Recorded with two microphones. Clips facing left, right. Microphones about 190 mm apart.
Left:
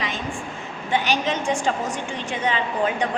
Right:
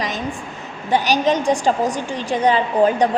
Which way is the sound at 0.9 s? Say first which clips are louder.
Right 6 dB; 40° right (ahead or behind).